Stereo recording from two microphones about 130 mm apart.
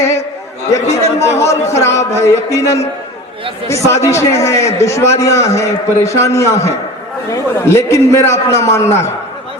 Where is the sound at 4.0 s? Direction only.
20° left (ahead or behind).